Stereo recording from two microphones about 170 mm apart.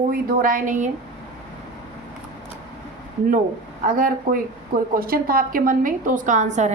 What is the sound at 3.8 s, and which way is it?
Speech, 55° right (ahead or behind).